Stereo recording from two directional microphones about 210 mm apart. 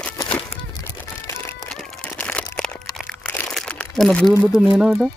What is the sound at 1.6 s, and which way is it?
Crumpling, 5° left (ahead or behind).